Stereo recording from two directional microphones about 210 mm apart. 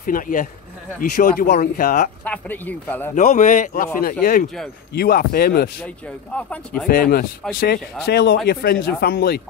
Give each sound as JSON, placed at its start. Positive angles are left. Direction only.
{"t": 0.0, "sound": "a man's voice", "side_deg": 40}
{"t": 2.2, "sound": "a man's voice", "side_deg": 5}
{"t": 3.2, "sound": "a man's voice", "side_deg": 35}
{"t": 5.8, "sound": "speech", "side_deg": 5}
{"t": 6.9, "sound": "a man's voice", "side_deg": 45}